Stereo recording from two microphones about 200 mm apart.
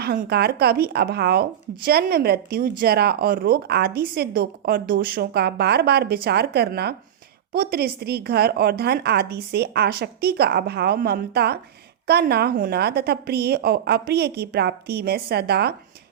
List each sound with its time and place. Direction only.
0.0 s speech: 55° right (ahead or behind)